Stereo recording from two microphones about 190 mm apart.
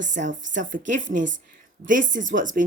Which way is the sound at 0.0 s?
40° right (ahead or behind).